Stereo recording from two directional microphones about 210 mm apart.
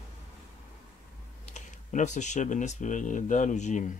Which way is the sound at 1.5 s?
35° left (ahead or behind).